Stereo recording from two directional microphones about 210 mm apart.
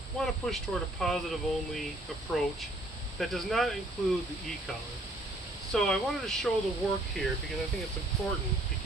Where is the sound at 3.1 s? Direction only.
Centre (ahead or behind).